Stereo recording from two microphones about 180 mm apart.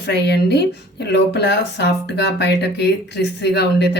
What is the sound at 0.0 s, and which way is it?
A woman's voice, 70° left (ahead or behind).